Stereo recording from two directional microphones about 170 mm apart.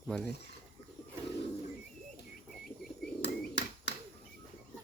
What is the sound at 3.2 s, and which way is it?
Bird, 80° left.